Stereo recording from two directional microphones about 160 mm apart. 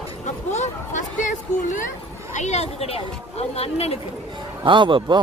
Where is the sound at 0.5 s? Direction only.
50° left (ahead or behind).